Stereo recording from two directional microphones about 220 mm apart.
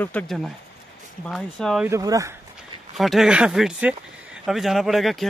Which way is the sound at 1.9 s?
15° right (ahead or behind).